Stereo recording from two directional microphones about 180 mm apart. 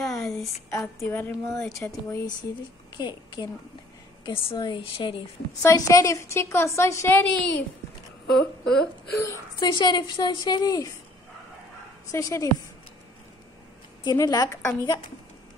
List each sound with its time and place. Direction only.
0.0 s a sound: centre (ahead or behind)
0.9 s a woman's voice: 10° left (ahead or behind)
8.3 s speech: 5° left (ahead or behind)
9.2 s a woman's voice: 20° left (ahead or behind)
12.1 s a woman's voice: 20° left (ahead or behind)
14.0 s a woman's voice: 20° left (ahead or behind)